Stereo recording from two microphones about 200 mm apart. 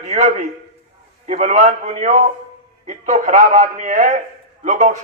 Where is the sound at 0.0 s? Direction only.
35° right (ahead or behind).